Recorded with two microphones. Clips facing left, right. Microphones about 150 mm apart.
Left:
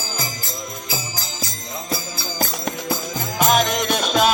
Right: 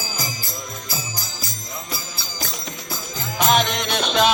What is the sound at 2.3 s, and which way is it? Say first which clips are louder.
Music: left 7 dB; 60° left (ahead or behind).